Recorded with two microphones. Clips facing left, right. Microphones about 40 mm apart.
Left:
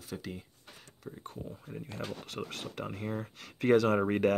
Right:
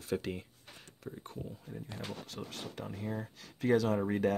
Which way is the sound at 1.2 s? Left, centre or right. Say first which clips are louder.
Left 1 dB; left.